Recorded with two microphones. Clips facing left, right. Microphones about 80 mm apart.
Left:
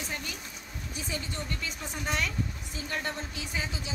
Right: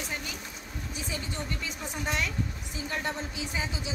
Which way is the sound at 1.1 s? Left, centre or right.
Centre.